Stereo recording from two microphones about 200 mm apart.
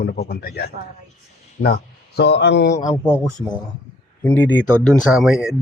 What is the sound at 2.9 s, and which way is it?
Speech, 10° left (ahead or behind).